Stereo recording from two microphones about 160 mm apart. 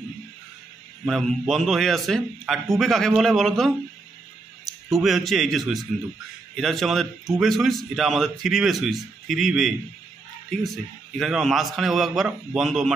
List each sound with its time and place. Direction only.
1.0 s a man's voice: centre (ahead or behind)
4.8 s a man's voice: centre (ahead or behind)
11.1 s a man's voice: centre (ahead or behind)